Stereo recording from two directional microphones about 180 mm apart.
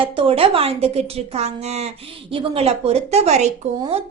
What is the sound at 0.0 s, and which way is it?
Speech, 30° right (ahead or behind).